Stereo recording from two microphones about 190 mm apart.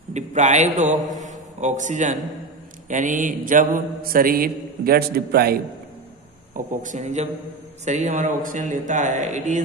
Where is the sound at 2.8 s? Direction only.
40° right (ahead or behind).